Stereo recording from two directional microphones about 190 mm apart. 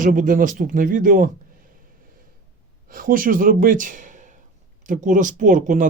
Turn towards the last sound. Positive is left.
turn(degrees=-40)  # may be behind; listen again after turning